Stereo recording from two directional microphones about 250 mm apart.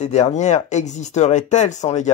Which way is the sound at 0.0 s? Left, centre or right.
Left.